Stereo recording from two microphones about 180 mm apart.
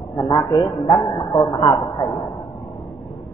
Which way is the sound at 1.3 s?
20° left (ahead or behind).